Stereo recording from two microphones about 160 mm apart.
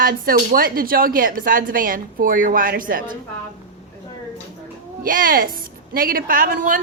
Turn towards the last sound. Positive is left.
turn(degrees=-60)  # may be behind; listen again after turning